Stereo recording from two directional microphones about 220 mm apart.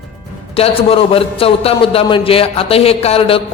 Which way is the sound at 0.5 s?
25° left (ahead or behind).